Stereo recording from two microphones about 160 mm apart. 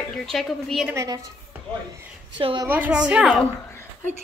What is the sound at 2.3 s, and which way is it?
Speech, 30° right (ahead or behind).